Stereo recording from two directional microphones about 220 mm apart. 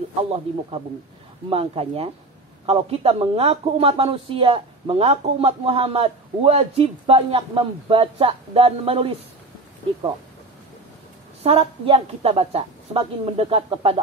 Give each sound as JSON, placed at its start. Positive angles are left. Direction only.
{"t": 1.5, "sound": "speech", "side_deg": -25}
{"t": 11.4, "sound": "speech", "side_deg": -25}